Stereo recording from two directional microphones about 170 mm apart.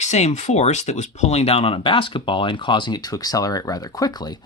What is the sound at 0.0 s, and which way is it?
Speech, 45° left (ahead or behind).